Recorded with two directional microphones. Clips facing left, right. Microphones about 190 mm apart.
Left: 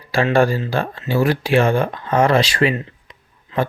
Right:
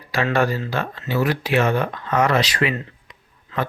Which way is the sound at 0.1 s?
30° left (ahead or behind).